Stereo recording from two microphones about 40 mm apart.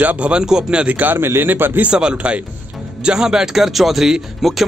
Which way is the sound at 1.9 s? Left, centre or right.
Right.